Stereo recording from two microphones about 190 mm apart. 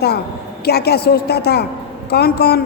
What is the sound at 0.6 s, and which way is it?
A woman's voice, 55° left (ahead or behind).